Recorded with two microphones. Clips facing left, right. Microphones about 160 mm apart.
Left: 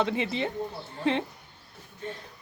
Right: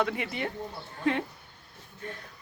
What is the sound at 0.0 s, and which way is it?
Speech, 25° left (ahead or behind).